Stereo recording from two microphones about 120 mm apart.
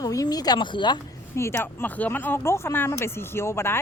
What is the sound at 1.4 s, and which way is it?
Speech, 20° left (ahead or behind).